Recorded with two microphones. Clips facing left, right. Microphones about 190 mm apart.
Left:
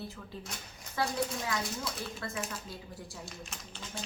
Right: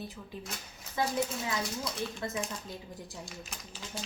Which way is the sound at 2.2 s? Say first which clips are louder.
Right 4 dB; 20° right (ahead or behind).